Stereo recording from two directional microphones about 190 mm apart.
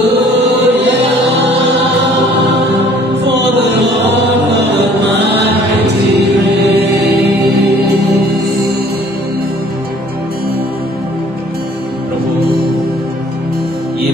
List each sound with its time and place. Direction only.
0.2 s chant: 65° right (ahead or behind)
3.3 s music: 65° right (ahead or behind)